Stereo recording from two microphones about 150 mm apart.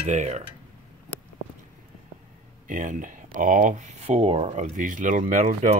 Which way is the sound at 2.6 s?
60° right (ahead or behind).